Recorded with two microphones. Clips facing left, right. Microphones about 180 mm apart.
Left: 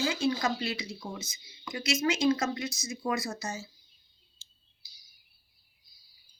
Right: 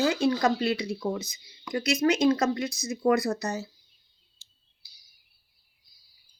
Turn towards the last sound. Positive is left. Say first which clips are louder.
# left 1 dB
turn(degrees=-60)  # may be behind; listen again after turning